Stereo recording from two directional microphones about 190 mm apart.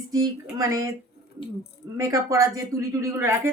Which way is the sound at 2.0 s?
15° right (ahead or behind).